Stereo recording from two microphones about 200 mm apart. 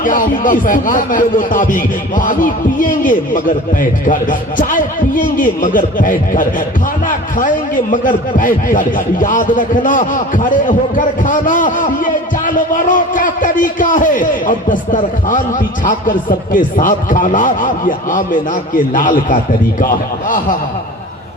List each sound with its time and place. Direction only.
0.0 s a man's voice: 40° left (ahead or behind)